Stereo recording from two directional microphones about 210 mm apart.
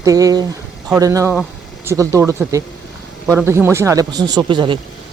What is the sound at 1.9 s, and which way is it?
Speech, 15° right (ahead or behind).